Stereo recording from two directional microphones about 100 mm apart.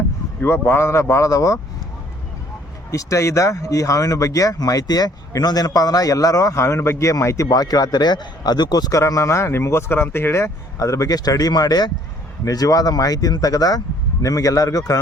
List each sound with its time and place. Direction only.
0.4 s speech: 25° left (ahead or behind)
2.9 s speech: 30° left (ahead or behind)